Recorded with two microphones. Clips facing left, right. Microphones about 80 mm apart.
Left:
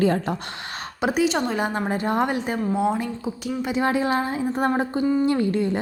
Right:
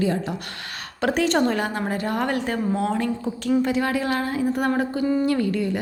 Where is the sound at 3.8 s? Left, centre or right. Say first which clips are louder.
Left 2 dB; left.